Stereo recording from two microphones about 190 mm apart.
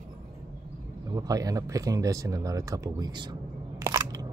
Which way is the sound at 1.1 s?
20° right (ahead or behind).